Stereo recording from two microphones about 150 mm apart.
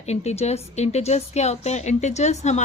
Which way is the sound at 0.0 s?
45° left (ahead or behind).